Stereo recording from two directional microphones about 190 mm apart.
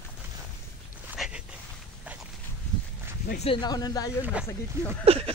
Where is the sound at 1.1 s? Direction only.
5° right (ahead or behind).